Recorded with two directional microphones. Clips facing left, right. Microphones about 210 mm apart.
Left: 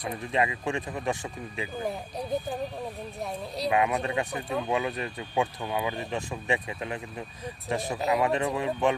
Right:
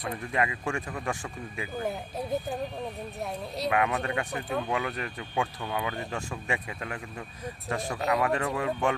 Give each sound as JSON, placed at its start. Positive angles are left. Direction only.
{"t": 0.1, "sound": "speech", "side_deg": 20}
{"t": 1.8, "sound": "speech", "side_deg": 0}
{"t": 3.7, "sound": "speech", "side_deg": 20}